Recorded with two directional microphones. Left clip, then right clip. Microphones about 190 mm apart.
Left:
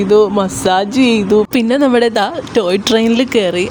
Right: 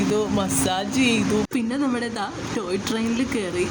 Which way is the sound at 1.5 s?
45° left (ahead or behind).